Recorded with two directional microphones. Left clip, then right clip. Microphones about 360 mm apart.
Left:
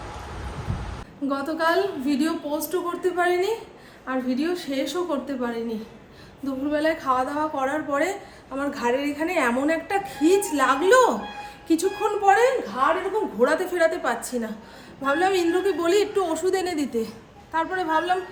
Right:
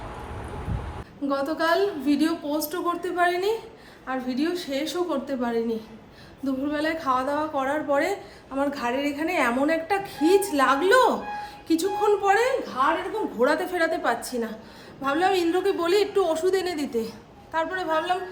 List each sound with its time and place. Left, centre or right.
1.3 s a woman's voice: centre